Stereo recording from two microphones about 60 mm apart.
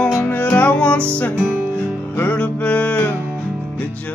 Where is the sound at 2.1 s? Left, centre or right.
Left.